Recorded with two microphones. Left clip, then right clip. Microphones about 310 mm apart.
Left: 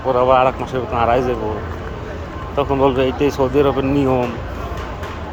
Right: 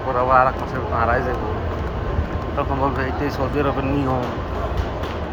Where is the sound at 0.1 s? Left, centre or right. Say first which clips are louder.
Left 3 dB; left.